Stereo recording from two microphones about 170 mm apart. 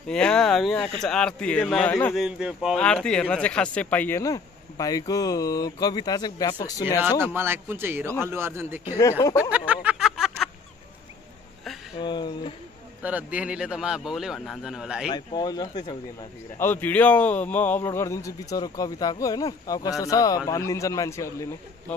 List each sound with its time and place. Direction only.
0.1 s speech: 5° left (ahead or behind)
2.1 s speech: 5° right (ahead or behind)
2.8 s speech: 5° left (ahead or behind)
4.2 s a man's voice: 20° left (ahead or behind)
7.0 s speech: 15° right (ahead or behind)
9.4 s a sound: 5° right (ahead or behind)
12.0 s speech: 25° left (ahead or behind)
13.0 s speech: 10° right (ahead or behind)
15.0 s a man's voice: 25° left (ahead or behind)
16.5 s a man's voice: 10° left (ahead or behind)